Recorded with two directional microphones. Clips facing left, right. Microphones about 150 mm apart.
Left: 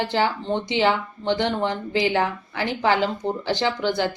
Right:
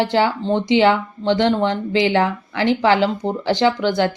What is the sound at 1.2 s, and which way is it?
Speech, 90° right.